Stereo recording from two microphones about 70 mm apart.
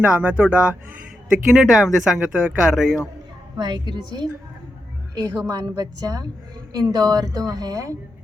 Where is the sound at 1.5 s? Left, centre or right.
Centre.